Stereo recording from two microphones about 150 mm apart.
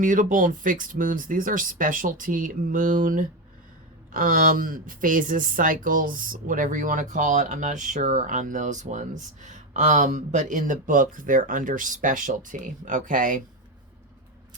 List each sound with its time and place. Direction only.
0.0 s speech: 60° right (ahead or behind)